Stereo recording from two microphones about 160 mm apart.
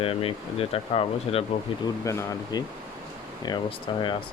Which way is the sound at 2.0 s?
20° left (ahead or behind).